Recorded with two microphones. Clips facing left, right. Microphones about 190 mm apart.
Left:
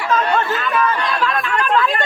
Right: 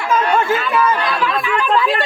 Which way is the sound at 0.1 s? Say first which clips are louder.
Right 2 dB; 10° right (ahead or behind).